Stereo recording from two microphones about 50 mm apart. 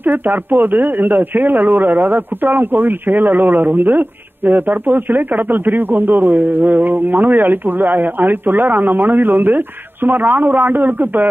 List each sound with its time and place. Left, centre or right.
0.0 s speech: right